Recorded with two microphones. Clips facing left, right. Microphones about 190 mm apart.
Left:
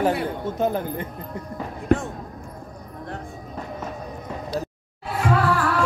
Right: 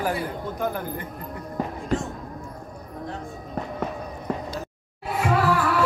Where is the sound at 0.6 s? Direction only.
25° left (ahead or behind).